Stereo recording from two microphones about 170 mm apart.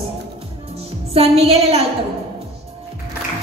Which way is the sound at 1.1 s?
35° right (ahead or behind).